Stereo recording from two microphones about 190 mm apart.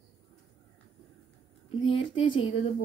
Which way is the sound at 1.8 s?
25° left (ahead or behind).